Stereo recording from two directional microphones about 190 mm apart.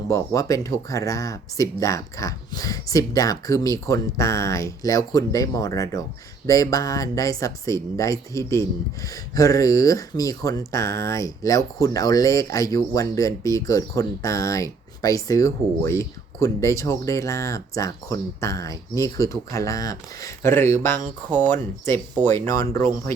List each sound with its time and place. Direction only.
0.1 s speech: 15° left (ahead or behind)